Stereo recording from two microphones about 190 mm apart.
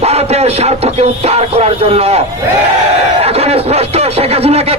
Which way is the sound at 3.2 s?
30° right (ahead or behind).